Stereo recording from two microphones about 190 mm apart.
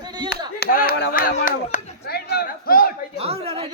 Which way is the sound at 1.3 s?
45° left (ahead or behind).